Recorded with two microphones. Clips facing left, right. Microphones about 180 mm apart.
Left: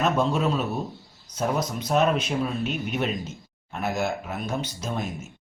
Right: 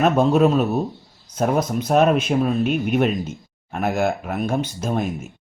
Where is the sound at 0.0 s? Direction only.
55° right (ahead or behind).